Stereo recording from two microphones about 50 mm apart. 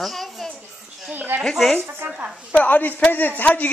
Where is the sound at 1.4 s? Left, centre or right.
Centre.